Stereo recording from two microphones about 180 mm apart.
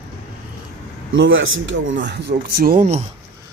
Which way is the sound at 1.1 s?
90° right.